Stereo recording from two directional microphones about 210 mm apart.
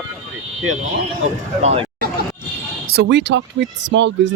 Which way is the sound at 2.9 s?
55° right (ahead or behind).